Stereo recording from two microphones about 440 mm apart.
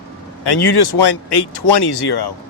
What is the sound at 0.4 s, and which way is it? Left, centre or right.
Speech, left.